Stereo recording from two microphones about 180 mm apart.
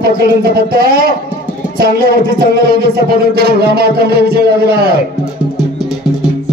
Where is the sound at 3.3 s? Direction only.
60° right (ahead or behind).